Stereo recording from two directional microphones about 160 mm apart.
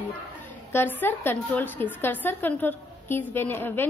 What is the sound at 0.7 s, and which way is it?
A woman's voice, 10° left (ahead or behind).